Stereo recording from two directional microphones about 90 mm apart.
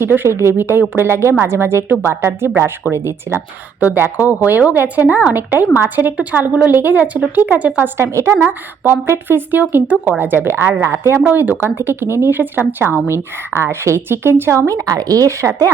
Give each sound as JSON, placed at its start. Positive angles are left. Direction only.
{"t": 0.0, "sound": "speech", "side_deg": -25}
{"t": 8.4, "sound": "speech", "side_deg": -20}